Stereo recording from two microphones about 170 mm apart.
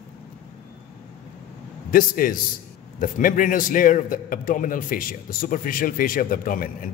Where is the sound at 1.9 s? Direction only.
55° left (ahead or behind).